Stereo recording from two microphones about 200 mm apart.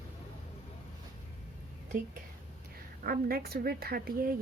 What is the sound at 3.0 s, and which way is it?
A woman's voice, 50° right (ahead or behind).